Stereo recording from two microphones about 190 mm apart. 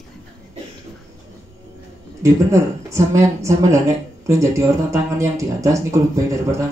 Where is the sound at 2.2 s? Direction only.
15° right (ahead or behind).